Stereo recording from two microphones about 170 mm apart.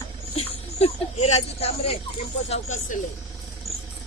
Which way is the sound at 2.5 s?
45° left (ahead or behind).